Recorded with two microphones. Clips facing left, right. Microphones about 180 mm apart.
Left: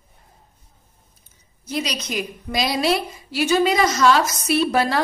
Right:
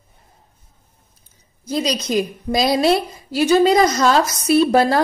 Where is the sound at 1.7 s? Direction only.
35° right (ahead or behind).